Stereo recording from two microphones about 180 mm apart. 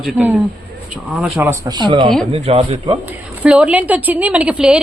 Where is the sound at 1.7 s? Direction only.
25° right (ahead or behind).